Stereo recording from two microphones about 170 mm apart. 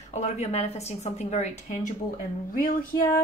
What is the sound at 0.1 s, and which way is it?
A woman's voice, 40° left (ahead or behind).